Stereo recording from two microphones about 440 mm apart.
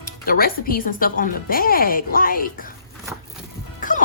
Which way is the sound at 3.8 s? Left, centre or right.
Centre.